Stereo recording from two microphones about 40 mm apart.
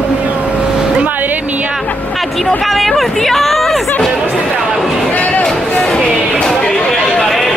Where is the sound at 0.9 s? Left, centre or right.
Right.